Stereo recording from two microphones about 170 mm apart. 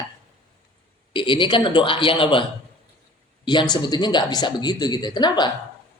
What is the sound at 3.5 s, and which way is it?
A man's voice, 25° left (ahead or behind).